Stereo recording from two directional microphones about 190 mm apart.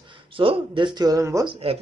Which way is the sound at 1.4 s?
30° right (ahead or behind).